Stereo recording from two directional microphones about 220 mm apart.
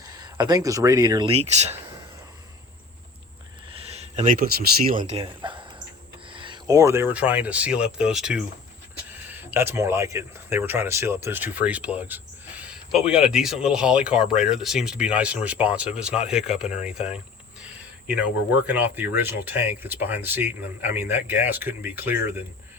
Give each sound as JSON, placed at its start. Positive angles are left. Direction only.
{"t": 0.0, "sound": "speech", "side_deg": -20}
{"t": 3.7, "sound": "a sound", "side_deg": -25}
{"t": 4.9, "sound": "speech", "side_deg": -35}